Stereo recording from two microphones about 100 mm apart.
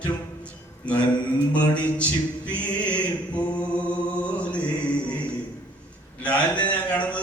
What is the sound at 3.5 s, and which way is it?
Mantra, 10° left (ahead or behind).